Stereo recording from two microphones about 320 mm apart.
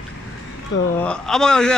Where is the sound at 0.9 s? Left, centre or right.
Centre.